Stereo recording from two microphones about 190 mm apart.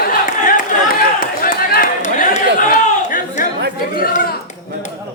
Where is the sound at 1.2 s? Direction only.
50° left (ahead or behind).